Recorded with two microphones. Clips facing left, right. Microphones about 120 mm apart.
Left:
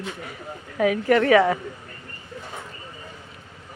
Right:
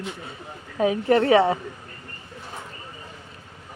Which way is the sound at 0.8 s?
30° right (ahead or behind).